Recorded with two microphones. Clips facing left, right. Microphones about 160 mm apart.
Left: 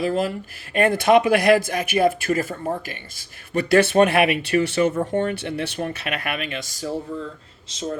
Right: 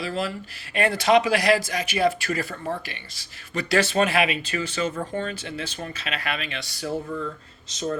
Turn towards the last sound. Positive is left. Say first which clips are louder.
# even
turn(degrees=25)  # may be behind; listen again after turning